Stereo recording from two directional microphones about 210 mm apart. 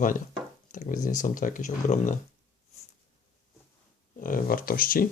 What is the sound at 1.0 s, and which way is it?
Speech, 40° left (ahead or behind).